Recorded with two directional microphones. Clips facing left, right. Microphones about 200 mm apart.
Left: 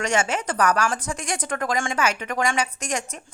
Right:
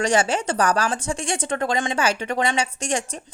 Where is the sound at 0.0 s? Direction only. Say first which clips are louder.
Right 3 dB; 30° right (ahead or behind).